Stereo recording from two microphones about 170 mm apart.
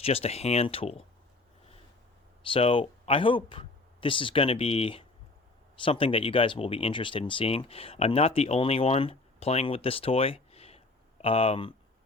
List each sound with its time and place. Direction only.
0.0 s speech: 35° left (ahead or behind)
2.5 s speech: 30° left (ahead or behind)